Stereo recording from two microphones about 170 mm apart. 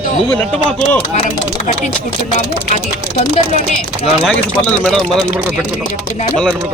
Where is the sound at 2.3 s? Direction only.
45° left (ahead or behind).